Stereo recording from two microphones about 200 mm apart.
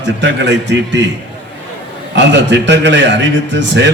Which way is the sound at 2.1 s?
65° right (ahead or behind).